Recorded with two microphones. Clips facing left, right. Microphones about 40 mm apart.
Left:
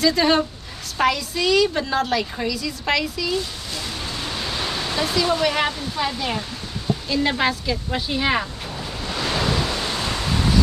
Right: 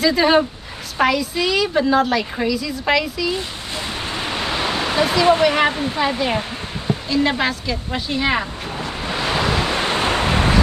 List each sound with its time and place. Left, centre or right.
0.0 s a woman's voice: centre
3.3 s pink noise: right
5.4 s speech: centre
5.7 s speech: right
5.9 s speech: right
7.2 s speech: centre
8.7 s waves: right
9.6 s waves: right